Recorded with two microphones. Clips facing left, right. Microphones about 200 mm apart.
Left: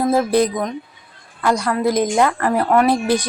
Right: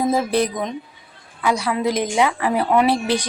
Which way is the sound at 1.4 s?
5° right (ahead or behind).